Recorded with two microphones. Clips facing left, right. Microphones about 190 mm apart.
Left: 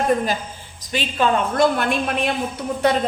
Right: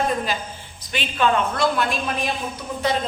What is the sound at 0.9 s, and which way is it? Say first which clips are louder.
Speech: left 3 dB; 35° left (ahead or behind).